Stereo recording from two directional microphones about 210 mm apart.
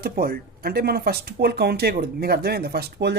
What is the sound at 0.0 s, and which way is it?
Speech, 45° right (ahead or behind).